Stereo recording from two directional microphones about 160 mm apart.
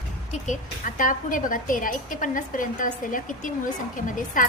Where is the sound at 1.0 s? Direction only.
55° left (ahead or behind).